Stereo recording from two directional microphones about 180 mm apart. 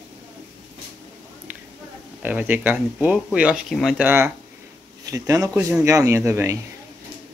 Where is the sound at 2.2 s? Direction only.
10° right (ahead or behind).